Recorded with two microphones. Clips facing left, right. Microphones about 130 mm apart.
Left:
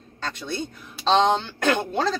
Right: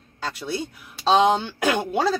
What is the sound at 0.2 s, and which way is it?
Speech, 5° right (ahead or behind).